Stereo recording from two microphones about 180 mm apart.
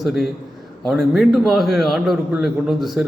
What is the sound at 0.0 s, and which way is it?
A man's voice, centre (ahead or behind).